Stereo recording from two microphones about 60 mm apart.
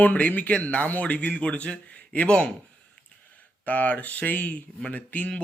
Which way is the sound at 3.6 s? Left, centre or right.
Left.